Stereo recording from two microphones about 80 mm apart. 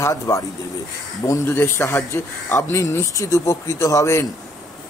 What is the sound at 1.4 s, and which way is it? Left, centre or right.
A man's voice, left.